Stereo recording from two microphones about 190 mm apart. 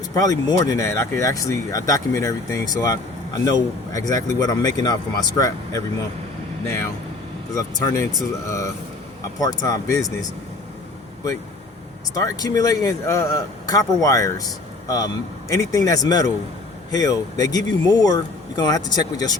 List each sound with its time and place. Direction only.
0.1 s speech: 20° left (ahead or behind)
7.5 s speech: 15° left (ahead or behind)
12.2 s speech: 20° left (ahead or behind)